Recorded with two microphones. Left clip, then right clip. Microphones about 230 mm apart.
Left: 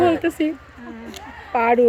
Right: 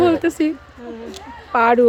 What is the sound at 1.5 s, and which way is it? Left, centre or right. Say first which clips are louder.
Speech: right 3 dB; centre.